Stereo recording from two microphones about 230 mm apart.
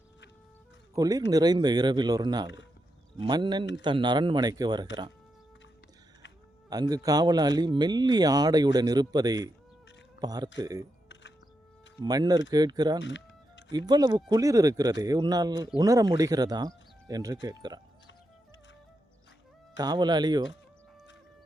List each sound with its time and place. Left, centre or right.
0.9 s speech: centre
6.7 s speech: centre
12.0 s speech: centre
13.0 s music: left
13.7 s speech: centre
19.7 s speech: centre